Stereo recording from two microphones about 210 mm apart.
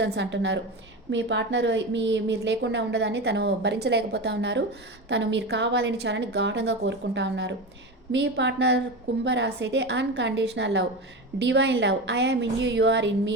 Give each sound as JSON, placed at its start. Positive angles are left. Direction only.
{"t": 0.0, "sound": "a woman's voice", "side_deg": -55}